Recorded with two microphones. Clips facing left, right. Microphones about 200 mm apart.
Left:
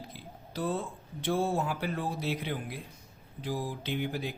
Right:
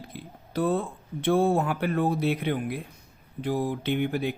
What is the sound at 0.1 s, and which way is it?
Speech, 60° right (ahead or behind).